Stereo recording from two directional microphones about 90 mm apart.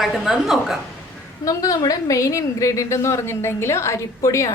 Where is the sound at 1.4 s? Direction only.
40° left (ahead or behind).